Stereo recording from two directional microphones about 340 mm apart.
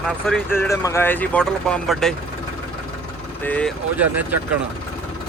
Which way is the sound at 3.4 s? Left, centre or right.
Centre.